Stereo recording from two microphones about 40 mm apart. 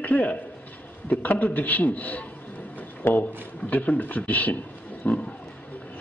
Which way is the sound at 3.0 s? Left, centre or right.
Left.